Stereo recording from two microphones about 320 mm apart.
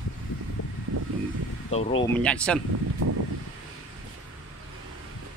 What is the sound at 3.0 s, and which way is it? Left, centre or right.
Vehicle, right.